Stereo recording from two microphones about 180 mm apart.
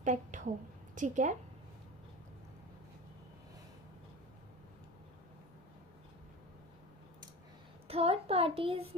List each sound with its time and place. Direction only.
0.0 s a woman's voice: 45° right (ahead or behind)
0.9 s child singing: 45° right (ahead or behind)
7.9 s child singing: 35° right (ahead or behind)